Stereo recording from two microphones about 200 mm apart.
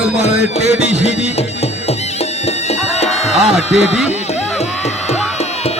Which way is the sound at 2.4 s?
30° left (ahead or behind).